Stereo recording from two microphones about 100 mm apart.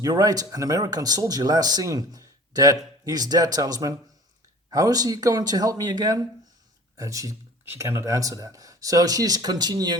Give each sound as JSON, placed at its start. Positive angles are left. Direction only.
{"t": 0.0, "sound": "speech", "side_deg": -40}
{"t": 7.6, "sound": "speech", "side_deg": -25}